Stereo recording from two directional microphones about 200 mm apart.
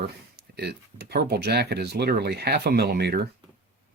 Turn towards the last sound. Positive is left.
turn(degrees=-55)  # may be behind; listen again after turning